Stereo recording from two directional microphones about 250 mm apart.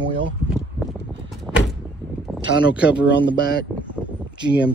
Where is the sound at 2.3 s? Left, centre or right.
Centre.